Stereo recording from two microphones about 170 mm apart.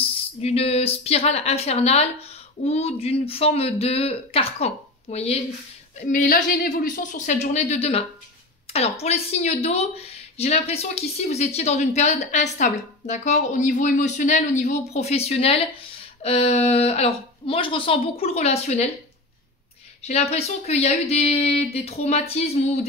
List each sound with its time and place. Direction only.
0.0 s a woman's voice: 35° left (ahead or behind)
6.0 s a woman's voice: 55° left (ahead or behind)
20.1 s a woman's voice: 40° left (ahead or behind)